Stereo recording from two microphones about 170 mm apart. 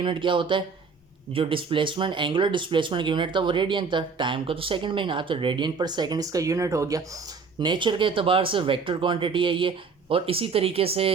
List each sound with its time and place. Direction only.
0.0 s speech: 30° right (ahead or behind)